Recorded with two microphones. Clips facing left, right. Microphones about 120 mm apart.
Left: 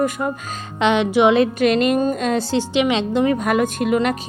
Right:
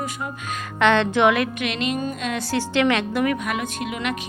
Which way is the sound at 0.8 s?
15° left (ahead or behind).